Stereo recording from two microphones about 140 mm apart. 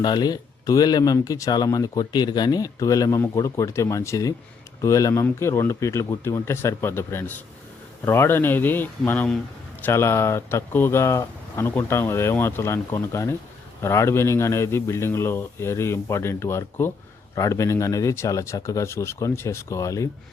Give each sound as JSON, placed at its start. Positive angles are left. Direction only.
{"t": 0.0, "sound": "speech", "side_deg": 30}